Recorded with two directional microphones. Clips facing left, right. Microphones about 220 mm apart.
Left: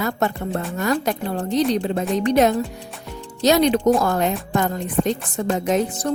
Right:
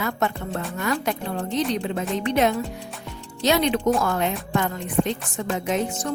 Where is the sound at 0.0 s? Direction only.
35° left (ahead or behind).